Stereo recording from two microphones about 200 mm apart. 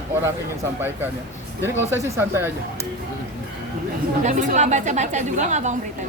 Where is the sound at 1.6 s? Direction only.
10° right (ahead or behind).